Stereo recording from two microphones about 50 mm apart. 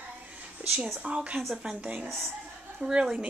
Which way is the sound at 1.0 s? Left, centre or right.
Right.